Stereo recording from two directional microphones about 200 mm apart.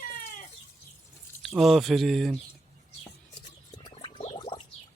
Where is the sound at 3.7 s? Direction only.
25° left (ahead or behind).